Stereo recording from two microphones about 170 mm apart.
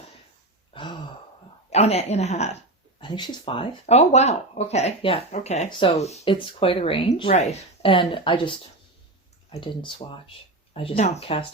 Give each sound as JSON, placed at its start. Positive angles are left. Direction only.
{"t": 0.7, "sound": "a sound", "side_deg": 30}
{"t": 1.7, "sound": "speech", "side_deg": 40}
{"t": 3.0, "sound": "speech", "side_deg": 25}